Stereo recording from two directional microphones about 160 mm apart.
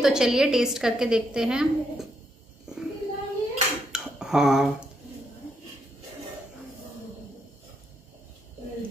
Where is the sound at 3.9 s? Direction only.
5° right (ahead or behind).